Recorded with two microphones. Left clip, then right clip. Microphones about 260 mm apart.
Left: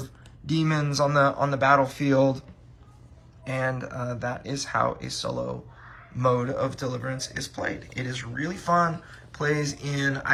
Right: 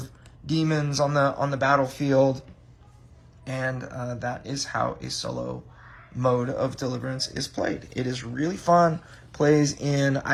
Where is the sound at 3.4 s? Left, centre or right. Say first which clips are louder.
Left 2 dB; centre.